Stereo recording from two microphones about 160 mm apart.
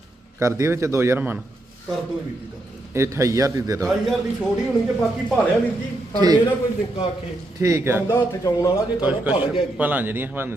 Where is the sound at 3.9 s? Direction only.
Centre (ahead or behind).